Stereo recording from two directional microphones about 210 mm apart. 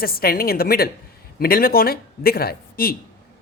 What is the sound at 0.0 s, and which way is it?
A woman's voice, 45° left (ahead or behind).